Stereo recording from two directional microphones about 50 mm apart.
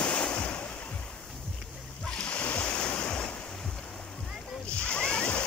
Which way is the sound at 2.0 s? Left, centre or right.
Left.